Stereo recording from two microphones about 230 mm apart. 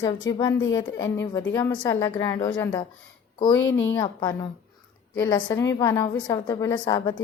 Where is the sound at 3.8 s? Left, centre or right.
Centre.